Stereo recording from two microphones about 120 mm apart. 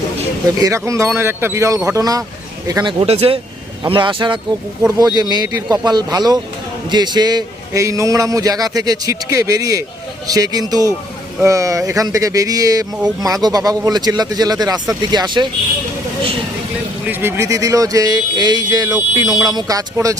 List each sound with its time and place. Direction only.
0.6 s a man's voice: 25° right (ahead or behind)
3.1 s a man's voice: 50° right (ahead or behind)
4.9 s a man's voice: 30° right (ahead or behind)
17.1 s a man's voice: 20° right (ahead or behind)